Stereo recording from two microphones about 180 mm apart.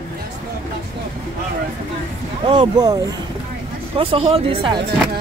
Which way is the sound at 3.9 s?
30° right (ahead or behind).